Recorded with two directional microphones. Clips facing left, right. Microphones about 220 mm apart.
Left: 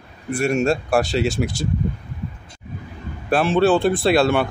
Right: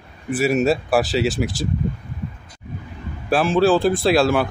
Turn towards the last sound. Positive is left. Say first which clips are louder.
# even
turn(degrees=0)  # may be behind; listen again after turning